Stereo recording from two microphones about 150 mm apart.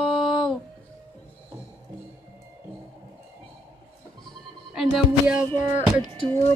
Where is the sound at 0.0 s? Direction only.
Centre (ahead or behind).